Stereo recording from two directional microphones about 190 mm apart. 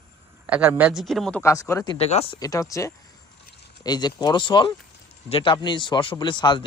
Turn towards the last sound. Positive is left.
turn(degrees=25)  # may be behind; listen again after turning